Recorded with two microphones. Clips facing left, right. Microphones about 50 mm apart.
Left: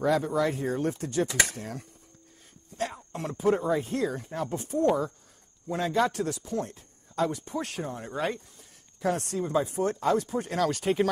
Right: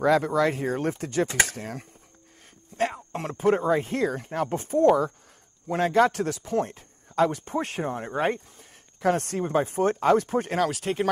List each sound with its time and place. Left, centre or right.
0.0 s a man's voice: right
9.0 s a man's voice: right
10.7 s speech: centre